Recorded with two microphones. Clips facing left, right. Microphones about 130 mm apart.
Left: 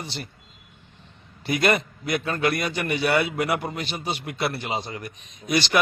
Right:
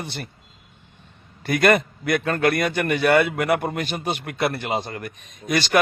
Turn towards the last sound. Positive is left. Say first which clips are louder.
# right 2 dB
turn(degrees=-50)  # may be behind; listen again after turning